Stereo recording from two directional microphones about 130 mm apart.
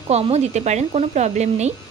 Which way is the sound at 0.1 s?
60° right (ahead or behind).